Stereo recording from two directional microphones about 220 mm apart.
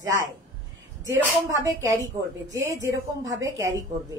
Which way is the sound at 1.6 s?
15° right (ahead or behind).